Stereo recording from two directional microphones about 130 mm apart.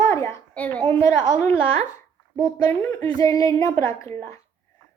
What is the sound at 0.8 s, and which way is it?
Speech, 20° left (ahead or behind).